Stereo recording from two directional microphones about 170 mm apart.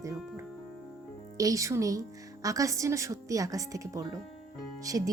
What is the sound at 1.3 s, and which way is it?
Speech, 20° right (ahead or behind).